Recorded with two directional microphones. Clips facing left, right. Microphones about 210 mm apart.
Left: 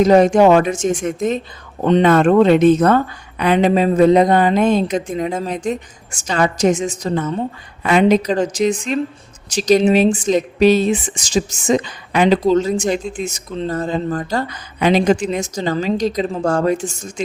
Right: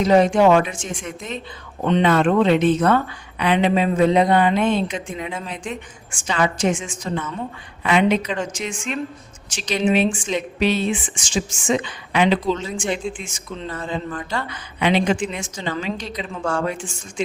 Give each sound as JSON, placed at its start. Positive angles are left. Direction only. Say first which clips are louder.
{"t": 0.0, "sound": "speech", "louder": "left 4 dB", "side_deg": 45}